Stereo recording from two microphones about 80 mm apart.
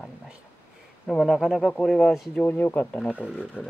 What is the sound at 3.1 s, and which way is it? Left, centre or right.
Speech, centre.